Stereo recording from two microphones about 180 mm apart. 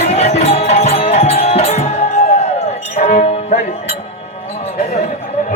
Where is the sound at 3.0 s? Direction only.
40° left (ahead or behind).